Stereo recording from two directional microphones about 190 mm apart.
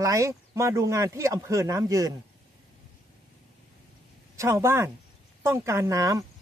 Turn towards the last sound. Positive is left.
turn(degrees=-15)  # may be behind; listen again after turning